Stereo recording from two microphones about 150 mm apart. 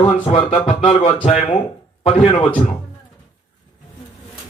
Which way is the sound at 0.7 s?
45° left (ahead or behind).